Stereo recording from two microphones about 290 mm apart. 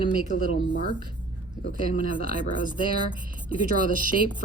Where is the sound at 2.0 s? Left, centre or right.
Right.